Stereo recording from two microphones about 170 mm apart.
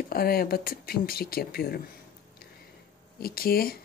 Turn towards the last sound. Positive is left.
turn(degrees=60)  # may be behind; listen again after turning